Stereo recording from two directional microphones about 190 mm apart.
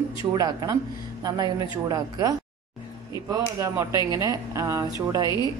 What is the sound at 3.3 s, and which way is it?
Speech, 15° right (ahead or behind).